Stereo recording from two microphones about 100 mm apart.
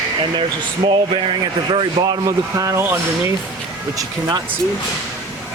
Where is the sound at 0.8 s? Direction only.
50° right (ahead or behind).